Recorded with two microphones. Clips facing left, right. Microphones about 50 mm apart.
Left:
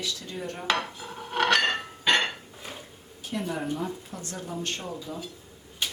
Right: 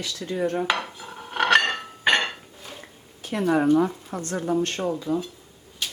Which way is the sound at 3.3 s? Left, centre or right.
Right.